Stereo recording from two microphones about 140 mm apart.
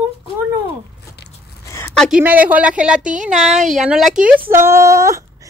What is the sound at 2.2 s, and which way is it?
A woman's voice, 10° right (ahead or behind).